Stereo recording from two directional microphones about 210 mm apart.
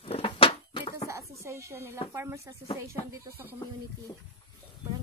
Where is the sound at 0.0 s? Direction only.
25° left (ahead or behind).